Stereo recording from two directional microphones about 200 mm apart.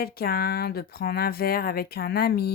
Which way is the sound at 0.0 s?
50° left (ahead or behind).